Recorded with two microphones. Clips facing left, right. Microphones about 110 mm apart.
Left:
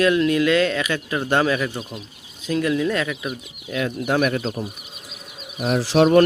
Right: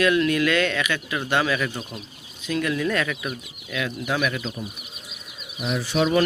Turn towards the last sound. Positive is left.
turn(degrees=90)